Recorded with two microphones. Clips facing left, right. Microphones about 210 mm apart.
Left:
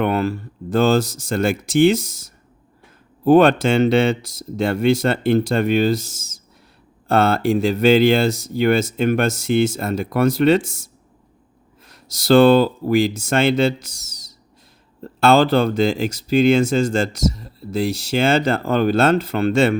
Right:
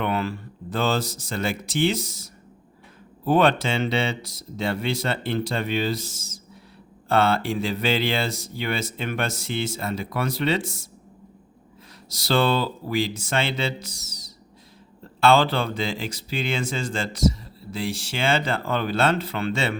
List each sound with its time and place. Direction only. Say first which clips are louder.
0.0 s speech: left 6 dB; 45° left (ahead or behind)
12.0 s speech: left 10 dB; 45° left (ahead or behind)